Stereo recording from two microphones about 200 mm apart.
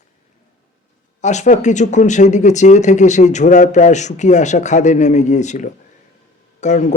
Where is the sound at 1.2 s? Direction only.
35° left (ahead or behind).